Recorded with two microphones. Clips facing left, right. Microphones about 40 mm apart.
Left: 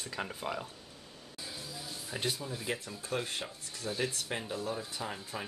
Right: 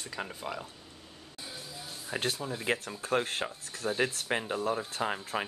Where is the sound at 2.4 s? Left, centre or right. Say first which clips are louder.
Right 5 dB; right.